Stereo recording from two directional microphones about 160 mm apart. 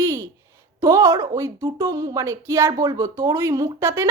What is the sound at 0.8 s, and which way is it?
A woman's voice, 20° right (ahead or behind).